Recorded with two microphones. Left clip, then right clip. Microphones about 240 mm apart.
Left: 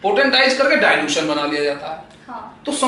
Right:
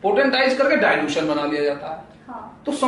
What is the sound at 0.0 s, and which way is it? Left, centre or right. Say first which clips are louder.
A woman's voice: left 3 dB; centre.